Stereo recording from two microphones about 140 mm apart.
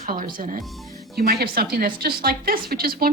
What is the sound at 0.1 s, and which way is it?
Speech, 80° right.